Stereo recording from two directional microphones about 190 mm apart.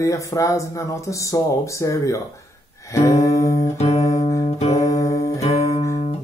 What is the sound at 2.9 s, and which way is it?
Music, 15° left (ahead or behind).